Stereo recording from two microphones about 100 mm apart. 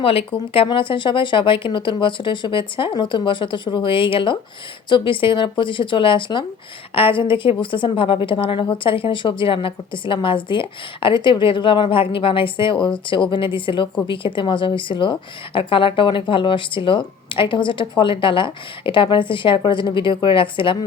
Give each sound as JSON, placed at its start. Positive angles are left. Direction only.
{"t": 0.0, "sound": "a woman's voice", "side_deg": 70}